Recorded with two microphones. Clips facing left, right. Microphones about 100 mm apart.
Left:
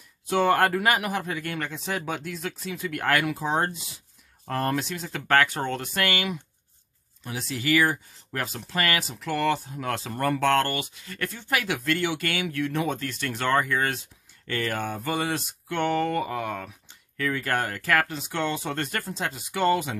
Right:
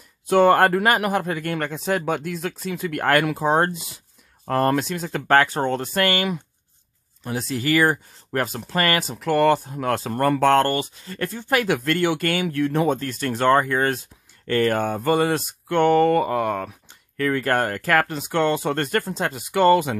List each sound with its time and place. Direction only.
0.3 s speech: 50° right (ahead or behind)
5.3 s speech: 35° right (ahead or behind); by 10.5 s 50° right (ahead or behind)
10.5 s speech: 35° right (ahead or behind); by 20.0 s 55° right (ahead or behind)